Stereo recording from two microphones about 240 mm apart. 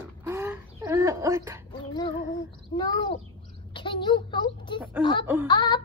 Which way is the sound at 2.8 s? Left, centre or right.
Centre.